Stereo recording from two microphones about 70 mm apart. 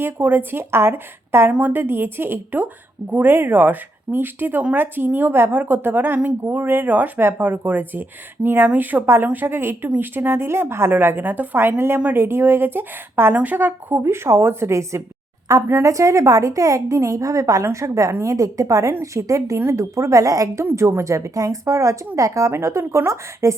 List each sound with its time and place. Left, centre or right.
0.0 s a woman's voice: right
1.5 s a woman's voice: right
14.0 s a woman's voice: right
20.7 s speech: right